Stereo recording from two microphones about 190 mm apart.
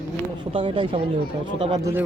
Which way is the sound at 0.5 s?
25° right (ahead or behind).